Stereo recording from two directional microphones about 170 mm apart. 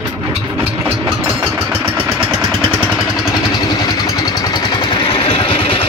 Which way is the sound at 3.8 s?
20° left (ahead or behind).